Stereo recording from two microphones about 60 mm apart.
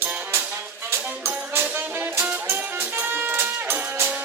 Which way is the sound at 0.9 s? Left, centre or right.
Right.